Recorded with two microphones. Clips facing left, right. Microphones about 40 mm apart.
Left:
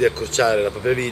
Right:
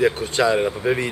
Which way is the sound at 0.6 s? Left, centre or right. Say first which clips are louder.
Left 1 dB; centre.